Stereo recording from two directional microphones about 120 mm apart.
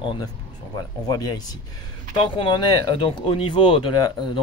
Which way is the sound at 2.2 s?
45° left (ahead or behind).